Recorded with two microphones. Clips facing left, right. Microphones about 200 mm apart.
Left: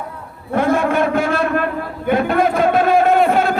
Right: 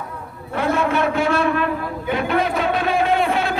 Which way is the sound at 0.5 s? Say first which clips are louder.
Left 4 dB; 50° left (ahead or behind).